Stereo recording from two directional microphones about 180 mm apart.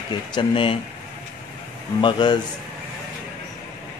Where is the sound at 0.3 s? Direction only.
25° left (ahead or behind).